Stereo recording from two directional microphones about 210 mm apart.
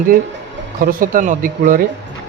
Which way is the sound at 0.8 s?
40° right (ahead or behind).